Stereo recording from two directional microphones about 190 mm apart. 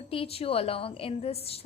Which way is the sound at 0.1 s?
30° left (ahead or behind).